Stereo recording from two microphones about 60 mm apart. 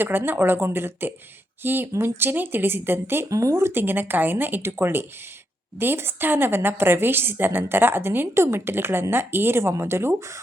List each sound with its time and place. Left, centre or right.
0.0 s a woman's voice: right
1.9 s a woman's voice: right
3.2 s a woman's voice: right